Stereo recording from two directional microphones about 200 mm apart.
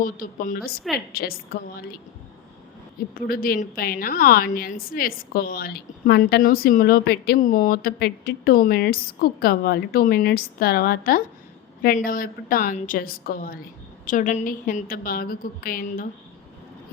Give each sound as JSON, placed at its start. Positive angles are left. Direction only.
{"t": 0.0, "sound": "a woman's voice", "side_deg": 45}
{"t": 3.2, "sound": "a woman's voice", "side_deg": 45}